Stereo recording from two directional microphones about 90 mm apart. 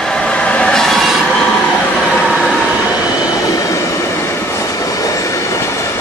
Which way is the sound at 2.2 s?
Centre (ahead or behind).